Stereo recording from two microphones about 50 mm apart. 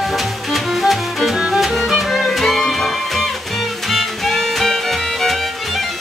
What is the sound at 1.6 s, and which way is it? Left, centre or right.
Music, centre.